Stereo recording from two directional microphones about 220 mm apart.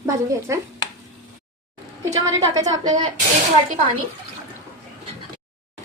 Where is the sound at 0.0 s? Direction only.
15° right (ahead or behind).